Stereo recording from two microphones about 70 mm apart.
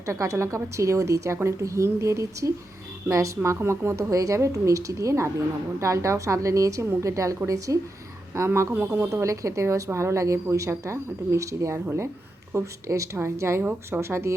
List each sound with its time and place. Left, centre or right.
0.0 s a woman's voice: right
8.3 s a woman's voice: right
9.2 s a woman's voice: right